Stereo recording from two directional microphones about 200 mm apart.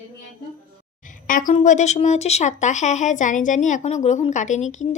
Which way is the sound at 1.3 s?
40° left (ahead or behind).